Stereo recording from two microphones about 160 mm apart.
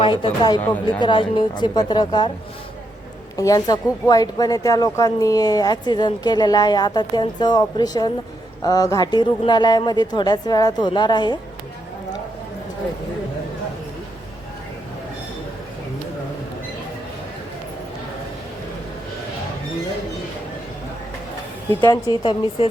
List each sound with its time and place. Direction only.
0.0 s speech: 30° left (ahead or behind)
3.3 s speech: 20° left (ahead or behind)
21.8 s speech: 25° left (ahead or behind)